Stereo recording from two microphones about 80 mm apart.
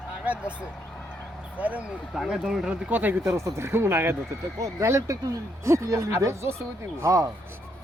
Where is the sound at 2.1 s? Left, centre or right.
Centre.